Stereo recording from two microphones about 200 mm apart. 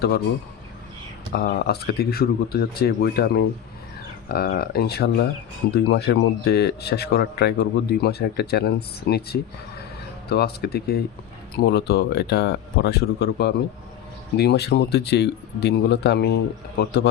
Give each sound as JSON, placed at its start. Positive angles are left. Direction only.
{"t": 1.3, "sound": "speech", "side_deg": 50}